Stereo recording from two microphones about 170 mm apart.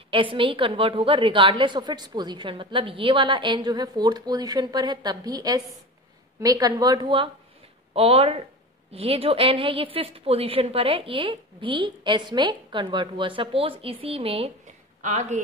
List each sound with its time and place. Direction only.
0.1 s a woman's voice: 30° right (ahead or behind)
15.0 s speech: 45° right (ahead or behind)